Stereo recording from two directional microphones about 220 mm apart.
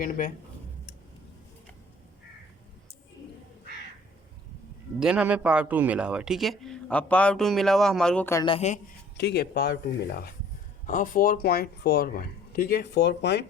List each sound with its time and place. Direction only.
0.0 s speech: 40° left (ahead or behind)
4.9 s a man's voice: 5° right (ahead or behind)
8.4 s speech: 30° left (ahead or behind)
9.1 s speech: 50° left (ahead or behind)